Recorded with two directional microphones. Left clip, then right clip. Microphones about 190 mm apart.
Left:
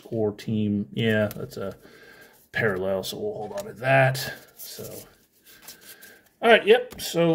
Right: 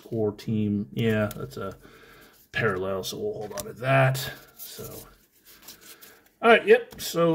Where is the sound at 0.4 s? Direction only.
10° left (ahead or behind).